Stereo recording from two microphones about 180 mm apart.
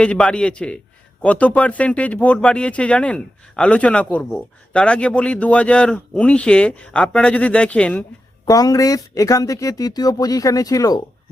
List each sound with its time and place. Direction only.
0.0 s a man's voice: 5° left (ahead or behind)
8.4 s speech: 20° left (ahead or behind)